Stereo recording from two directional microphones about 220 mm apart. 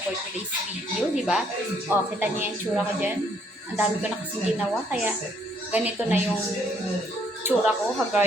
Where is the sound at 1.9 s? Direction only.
10° right (ahead or behind).